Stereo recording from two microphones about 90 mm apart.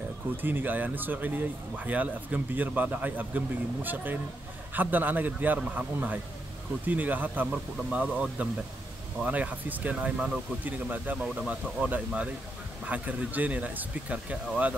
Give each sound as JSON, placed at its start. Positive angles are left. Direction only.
{"t": 0.4, "sound": "speech", "side_deg": -20}